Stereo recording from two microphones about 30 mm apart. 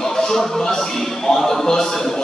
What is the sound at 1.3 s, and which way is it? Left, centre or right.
Speech, centre.